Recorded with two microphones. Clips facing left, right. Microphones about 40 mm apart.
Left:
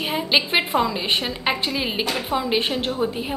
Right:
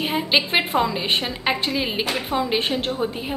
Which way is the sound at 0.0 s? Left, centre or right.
Centre.